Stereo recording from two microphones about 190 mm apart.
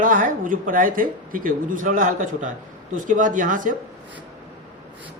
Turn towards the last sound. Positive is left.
turn(degrees=-45)  # may be behind; listen again after turning